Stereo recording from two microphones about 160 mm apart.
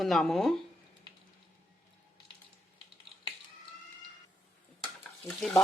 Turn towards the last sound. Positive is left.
turn(degrees=10)  # may be behind; listen again after turning